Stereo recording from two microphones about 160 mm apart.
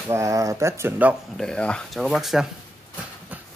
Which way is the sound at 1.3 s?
5° left (ahead or behind).